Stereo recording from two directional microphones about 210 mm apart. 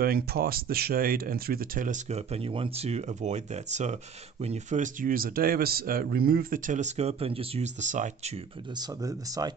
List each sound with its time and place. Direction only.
0.0 s speech: 45° right (ahead or behind)